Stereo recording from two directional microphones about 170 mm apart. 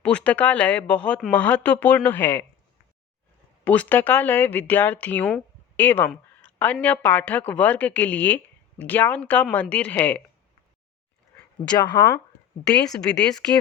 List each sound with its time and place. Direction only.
0.0 s speech: 5° left (ahead or behind)
3.6 s speech: 10° left (ahead or behind)
6.1 s a sound: 10° left (ahead or behind)
6.8 s speech: 10° left (ahead or behind)
11.7 s speech: 25° left (ahead or behind)
12.6 s speech: 5° left (ahead or behind)